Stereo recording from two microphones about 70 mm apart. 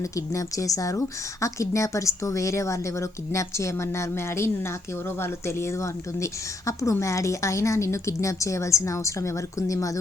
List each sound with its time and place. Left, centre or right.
0.0 s speech: left